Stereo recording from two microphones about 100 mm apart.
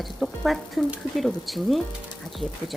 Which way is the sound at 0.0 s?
Centre (ahead or behind).